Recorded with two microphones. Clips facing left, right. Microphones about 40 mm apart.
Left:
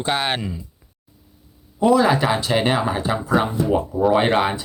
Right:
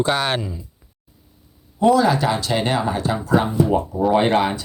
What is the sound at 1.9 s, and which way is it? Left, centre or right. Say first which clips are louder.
Speech: left 1 dB; left.